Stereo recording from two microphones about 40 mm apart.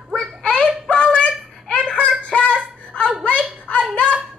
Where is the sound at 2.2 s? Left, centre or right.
Left.